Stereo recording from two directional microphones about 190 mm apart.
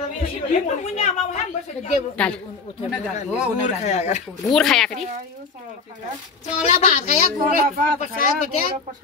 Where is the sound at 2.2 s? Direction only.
5° left (ahead or behind).